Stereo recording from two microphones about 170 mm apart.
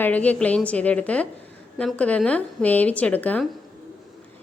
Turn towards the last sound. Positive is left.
turn(degrees=10)  # may be behind; listen again after turning